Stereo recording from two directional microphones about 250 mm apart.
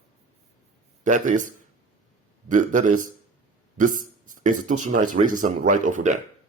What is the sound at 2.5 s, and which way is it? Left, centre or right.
Speech, right.